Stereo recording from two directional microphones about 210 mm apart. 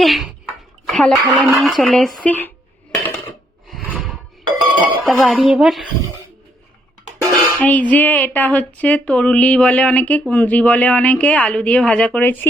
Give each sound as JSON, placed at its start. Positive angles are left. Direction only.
{"t": 0.0, "sound": "a child's voice", "side_deg": 0}
{"t": 3.7, "sound": "a sound", "side_deg": 0}
{"t": 4.4, "sound": "music", "side_deg": -20}
{"t": 5.0, "sound": "speech", "side_deg": 0}
{"t": 7.2, "sound": "dishes", "side_deg": 5}